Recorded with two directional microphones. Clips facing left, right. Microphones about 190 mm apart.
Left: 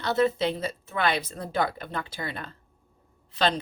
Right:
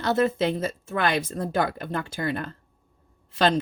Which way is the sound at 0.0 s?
50° right (ahead or behind).